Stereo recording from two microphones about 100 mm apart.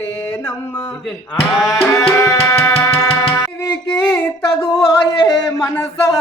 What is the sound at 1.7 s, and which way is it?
Music, 20° left (ahead or behind).